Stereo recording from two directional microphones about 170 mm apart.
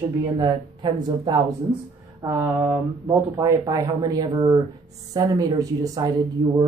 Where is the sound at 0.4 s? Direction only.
25° right (ahead or behind).